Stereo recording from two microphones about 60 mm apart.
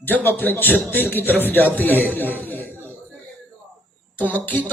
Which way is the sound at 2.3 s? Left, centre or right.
Left.